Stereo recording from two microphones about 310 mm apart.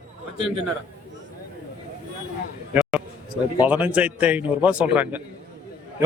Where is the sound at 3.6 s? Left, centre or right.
Centre.